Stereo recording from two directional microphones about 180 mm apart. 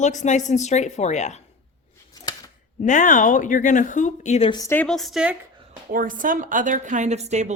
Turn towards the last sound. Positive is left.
turn(degrees=-40)  # may be behind; listen again after turning